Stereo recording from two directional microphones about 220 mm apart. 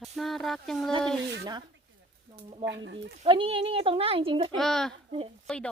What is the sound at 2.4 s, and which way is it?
Speech, 20° right (ahead or behind).